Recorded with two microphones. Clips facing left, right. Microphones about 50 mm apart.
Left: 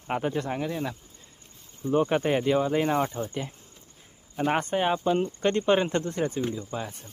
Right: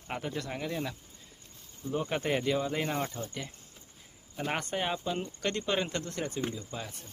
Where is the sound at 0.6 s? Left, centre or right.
Centre.